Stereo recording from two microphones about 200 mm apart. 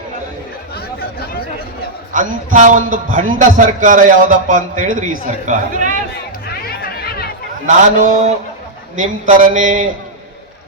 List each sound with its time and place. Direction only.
2.1 s a man's voice: 40° right (ahead or behind)
6.5 s chatter: 50° left (ahead or behind)
7.9 s a man's voice: 40° right (ahead or behind)